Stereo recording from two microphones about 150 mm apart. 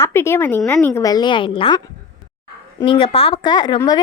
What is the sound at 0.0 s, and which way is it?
Speech, 15° left (ahead or behind).